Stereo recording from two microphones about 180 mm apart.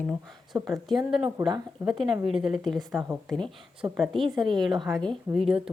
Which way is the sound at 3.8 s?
20° right (ahead or behind).